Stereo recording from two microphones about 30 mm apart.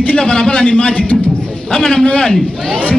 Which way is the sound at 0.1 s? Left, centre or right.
Left.